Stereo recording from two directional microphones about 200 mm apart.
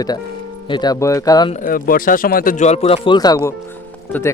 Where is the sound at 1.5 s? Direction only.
45° left (ahead or behind).